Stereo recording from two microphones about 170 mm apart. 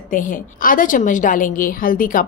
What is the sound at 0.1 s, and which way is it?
A woman's voice, 50° left (ahead or behind).